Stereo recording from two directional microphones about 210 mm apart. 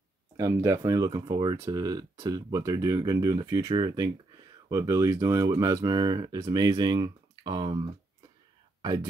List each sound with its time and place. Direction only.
0.4 s speech: 15° right (ahead or behind)